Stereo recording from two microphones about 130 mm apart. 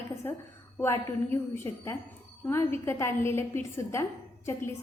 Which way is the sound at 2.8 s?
20° left (ahead or behind).